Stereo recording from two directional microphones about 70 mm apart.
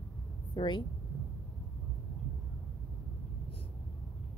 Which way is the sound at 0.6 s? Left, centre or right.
Left.